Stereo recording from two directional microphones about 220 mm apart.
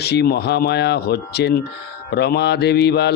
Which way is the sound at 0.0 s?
45° left (ahead or behind).